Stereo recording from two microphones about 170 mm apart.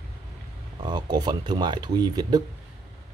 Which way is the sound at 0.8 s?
25° right (ahead or behind).